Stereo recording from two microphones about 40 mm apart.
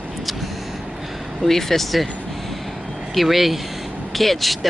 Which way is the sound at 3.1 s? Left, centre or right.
Centre.